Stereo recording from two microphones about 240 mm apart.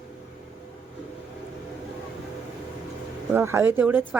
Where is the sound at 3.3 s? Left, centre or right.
Centre.